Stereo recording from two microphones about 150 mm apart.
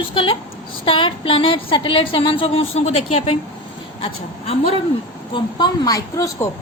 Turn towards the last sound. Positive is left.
turn(degrees=20)  # may be behind; listen again after turning